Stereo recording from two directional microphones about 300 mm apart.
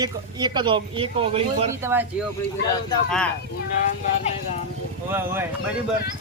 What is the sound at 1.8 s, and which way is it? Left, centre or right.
Speech, centre.